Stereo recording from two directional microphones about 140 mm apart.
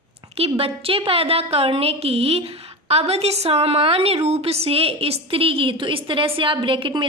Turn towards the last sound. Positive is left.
turn(degrees=-35)  # may be behind; listen again after turning